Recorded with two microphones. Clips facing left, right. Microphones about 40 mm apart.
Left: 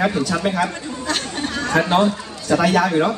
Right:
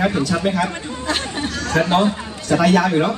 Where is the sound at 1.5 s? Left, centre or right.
Left.